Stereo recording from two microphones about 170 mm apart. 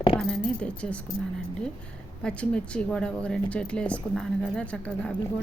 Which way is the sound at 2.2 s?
5° left (ahead or behind).